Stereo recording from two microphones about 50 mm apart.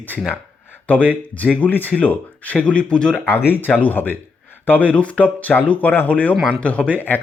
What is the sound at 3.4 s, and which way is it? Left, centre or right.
Speech, left.